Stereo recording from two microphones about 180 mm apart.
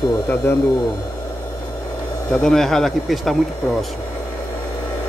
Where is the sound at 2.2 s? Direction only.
5° left (ahead or behind).